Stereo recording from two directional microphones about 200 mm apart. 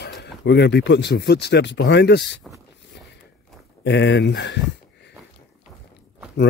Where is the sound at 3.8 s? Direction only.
65° left (ahead or behind).